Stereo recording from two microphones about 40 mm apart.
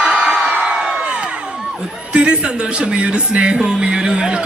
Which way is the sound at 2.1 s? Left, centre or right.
Right.